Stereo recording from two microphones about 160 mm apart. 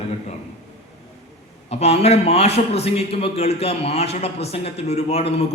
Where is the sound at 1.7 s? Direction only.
40° left (ahead or behind).